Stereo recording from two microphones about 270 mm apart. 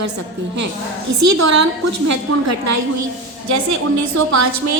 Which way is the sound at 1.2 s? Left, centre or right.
Right.